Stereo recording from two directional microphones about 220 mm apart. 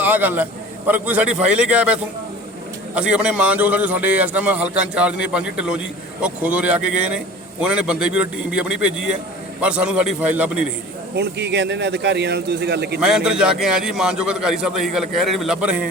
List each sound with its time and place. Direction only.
0.0 s a man's voice: 10° right (ahead or behind)
11.1 s a man's voice: 50° right (ahead or behind)
13.0 s a man's voice: 5° right (ahead or behind)